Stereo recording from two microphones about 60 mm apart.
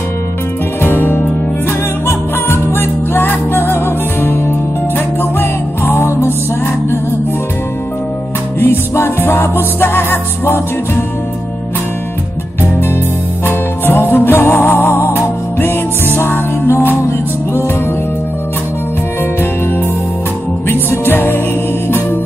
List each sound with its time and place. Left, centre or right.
0.8 s music: left
8.5 s music: left
13.5 s music: left
20.6 s music: left